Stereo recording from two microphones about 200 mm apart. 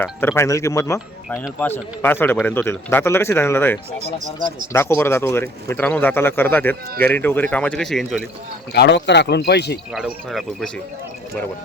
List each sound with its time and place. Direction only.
0.0 s speech: 10° left (ahead or behind)
8.7 s speech: 55° left (ahead or behind)
9.9 s speech: centre (ahead or behind)